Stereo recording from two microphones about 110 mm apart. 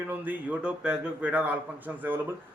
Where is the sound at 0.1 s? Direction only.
15° right (ahead or behind).